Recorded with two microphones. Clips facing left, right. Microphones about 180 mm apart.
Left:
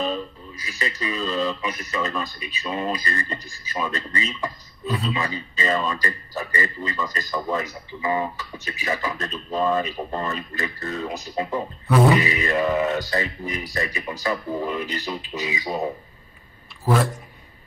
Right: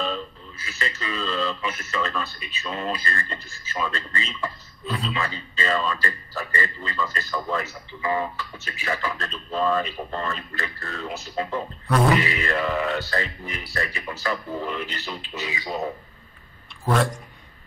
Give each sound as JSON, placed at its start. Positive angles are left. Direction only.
{"t": 0.0, "sound": "speech", "side_deg": 15}
{"t": 16.8, "sound": "a man's voice", "side_deg": 0}